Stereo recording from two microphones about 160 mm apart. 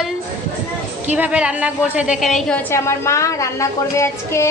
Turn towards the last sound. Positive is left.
turn(degrees=20)  # may be behind; listen again after turning